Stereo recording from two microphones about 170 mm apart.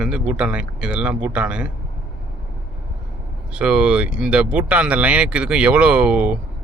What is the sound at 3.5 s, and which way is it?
Speech, 5° right (ahead or behind).